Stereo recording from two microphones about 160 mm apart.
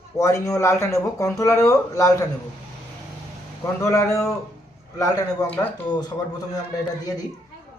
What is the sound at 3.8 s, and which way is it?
Speech, 20° left (ahead or behind).